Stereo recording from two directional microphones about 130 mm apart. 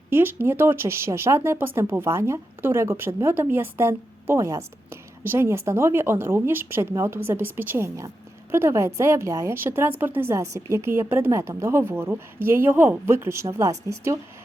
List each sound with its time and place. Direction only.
0.1 s speech: 15° right (ahead or behind)